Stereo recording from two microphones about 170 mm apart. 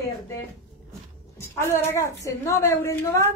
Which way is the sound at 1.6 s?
15° left (ahead or behind).